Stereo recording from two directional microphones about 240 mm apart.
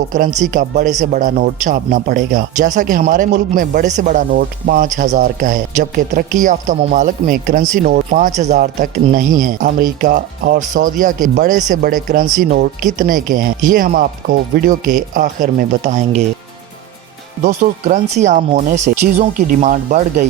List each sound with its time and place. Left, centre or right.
0.1 s a man's voice: right
17.4 s a man's voice: right